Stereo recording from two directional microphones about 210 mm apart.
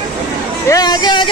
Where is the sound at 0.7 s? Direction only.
20° left (ahead or behind).